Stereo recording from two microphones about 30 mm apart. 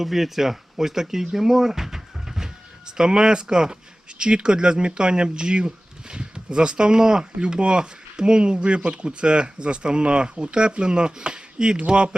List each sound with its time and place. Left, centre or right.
0.0 s speech: centre; by 12.1 s right